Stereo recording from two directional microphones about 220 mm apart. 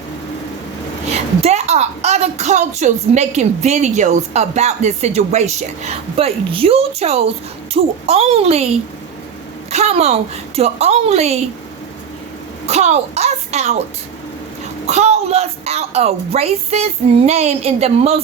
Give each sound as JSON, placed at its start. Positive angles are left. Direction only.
{"t": 1.1, "sound": "a woman's voice", "side_deg": -30}
{"t": 9.7, "sound": "a woman's voice", "side_deg": -30}
{"t": 12.6, "sound": "a woman's voice", "side_deg": -30}
{"t": 14.8, "sound": "a woman's voice", "side_deg": -30}